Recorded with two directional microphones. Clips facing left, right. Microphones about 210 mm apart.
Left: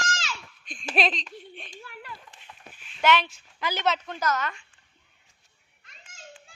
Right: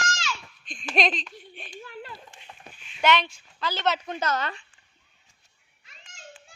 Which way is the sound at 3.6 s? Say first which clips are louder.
Even; 15° left (ahead or behind).